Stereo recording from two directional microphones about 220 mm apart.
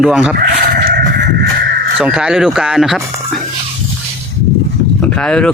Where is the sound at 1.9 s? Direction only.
5° right (ahead or behind).